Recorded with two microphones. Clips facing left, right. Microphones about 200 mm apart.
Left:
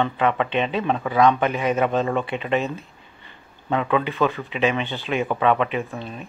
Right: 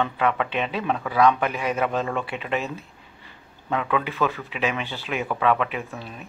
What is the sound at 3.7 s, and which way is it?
Speech, 30° left (ahead or behind).